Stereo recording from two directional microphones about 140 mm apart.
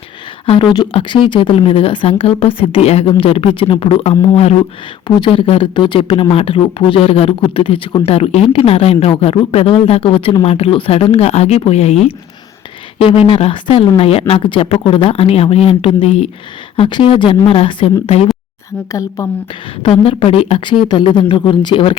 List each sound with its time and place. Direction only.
0.4 s a woman's voice: 40° left (ahead or behind)
18.9 s a woman's voice: 20° left (ahead or behind)
19.8 s a woman's voice: 40° left (ahead or behind)